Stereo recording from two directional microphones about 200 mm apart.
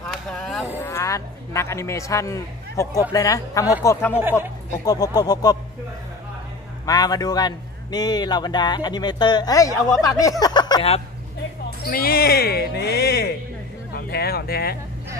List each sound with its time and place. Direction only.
0.1 s a sound: centre (ahead or behind)
0.7 s speech: 15° left (ahead or behind)
4.2 s a woman's voice: 10° right (ahead or behind)
4.8 s a man's voice: 20° left (ahead or behind)
6.9 s a man's voice: 20° left (ahead or behind)
11.8 s speech: 50° left (ahead or behind)